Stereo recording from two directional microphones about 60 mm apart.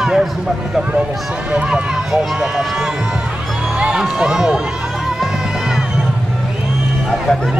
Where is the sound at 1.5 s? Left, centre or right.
Centre.